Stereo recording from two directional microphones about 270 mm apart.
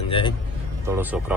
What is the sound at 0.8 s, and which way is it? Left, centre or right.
Speech, centre.